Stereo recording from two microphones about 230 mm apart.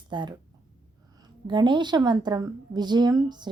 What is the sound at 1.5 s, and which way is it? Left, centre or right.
A woman's voice, centre.